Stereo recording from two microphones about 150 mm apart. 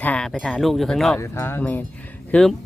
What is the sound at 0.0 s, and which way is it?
Livestock, 5° left (ahead or behind).